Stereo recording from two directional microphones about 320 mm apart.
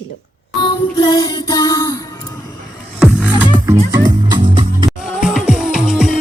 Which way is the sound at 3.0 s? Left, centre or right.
Centre.